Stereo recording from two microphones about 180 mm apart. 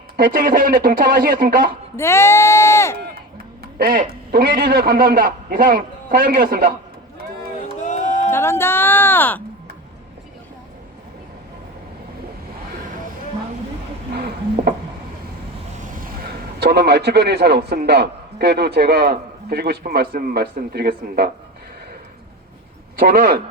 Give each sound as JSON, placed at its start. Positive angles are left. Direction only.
{"t": 0.2, "sound": "a man's voice", "side_deg": -50}
{"t": 2.0, "sound": "speech", "side_deg": 15}
{"t": 3.6, "sound": "a sound", "side_deg": -55}
{"t": 4.3, "sound": "a man's voice", "side_deg": -55}
{"t": 7.8, "sound": "a sound", "side_deg": 45}
{"t": 8.3, "sound": "speech", "side_deg": 15}
{"t": 14.1, "sound": "a sound", "side_deg": -65}
{"t": 15.8, "sound": "a man's voice", "side_deg": -55}
{"t": 23.0, "sound": "a man's voice", "side_deg": -55}